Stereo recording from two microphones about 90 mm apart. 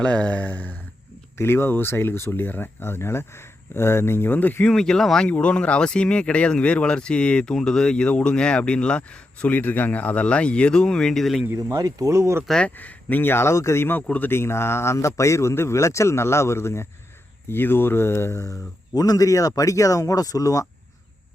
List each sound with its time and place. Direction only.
0.0 s speech: 10° left (ahead or behind)
4.6 s speech: 5° left (ahead or behind)
11.7 s speech: 40° right (ahead or behind)
12.5 s speech: 10° left (ahead or behind)
12.7 s speech: 20° left (ahead or behind); by 20.7 s 40° left (ahead or behind)